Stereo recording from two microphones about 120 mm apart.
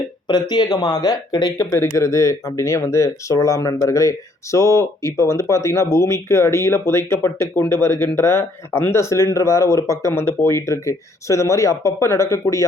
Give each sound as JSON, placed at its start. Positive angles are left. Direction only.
{"t": 0.3, "sound": "speech", "side_deg": 35}